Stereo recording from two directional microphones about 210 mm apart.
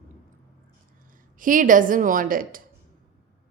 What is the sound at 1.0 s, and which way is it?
A woman's voice, 40° right (ahead or behind).